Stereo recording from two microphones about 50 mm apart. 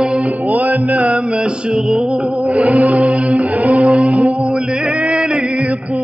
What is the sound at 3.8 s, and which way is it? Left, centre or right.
Music, centre.